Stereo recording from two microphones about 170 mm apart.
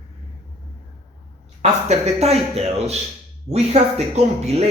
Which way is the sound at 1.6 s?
40° right (ahead or behind).